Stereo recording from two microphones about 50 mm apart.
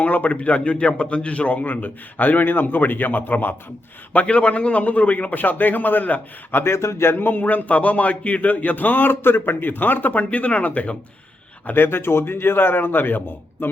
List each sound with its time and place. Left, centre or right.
0.0 s speech: left
4.1 s speech: left
6.5 s speech: left
11.6 s a man's voice: left